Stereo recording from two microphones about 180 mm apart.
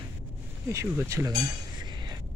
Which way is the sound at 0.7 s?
15° right (ahead or behind).